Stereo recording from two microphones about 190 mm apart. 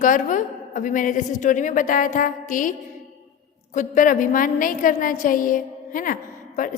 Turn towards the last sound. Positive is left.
turn(degrees=40)  # may be behind; listen again after turning